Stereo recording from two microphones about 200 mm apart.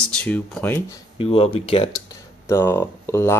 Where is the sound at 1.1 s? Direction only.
30° left (ahead or behind).